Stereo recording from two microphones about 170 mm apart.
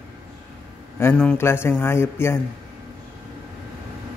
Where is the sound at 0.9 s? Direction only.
10° left (ahead or behind).